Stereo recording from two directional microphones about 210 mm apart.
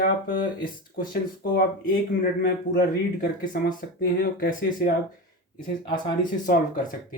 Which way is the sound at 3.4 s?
40° left (ahead or behind).